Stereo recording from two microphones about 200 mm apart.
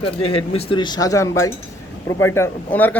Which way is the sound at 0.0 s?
25° left (ahead or behind).